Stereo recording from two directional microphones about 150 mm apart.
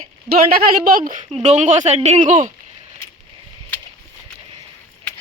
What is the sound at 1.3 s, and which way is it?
Speech, 50° right (ahead or behind).